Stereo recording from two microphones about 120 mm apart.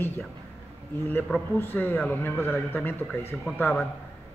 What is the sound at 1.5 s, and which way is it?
Speech, 15° left (ahead or behind).